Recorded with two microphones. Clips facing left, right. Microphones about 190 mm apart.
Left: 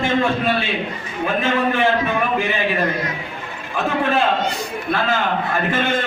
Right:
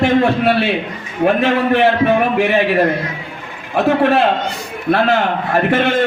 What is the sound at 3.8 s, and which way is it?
A man's voice, 65° right (ahead or behind).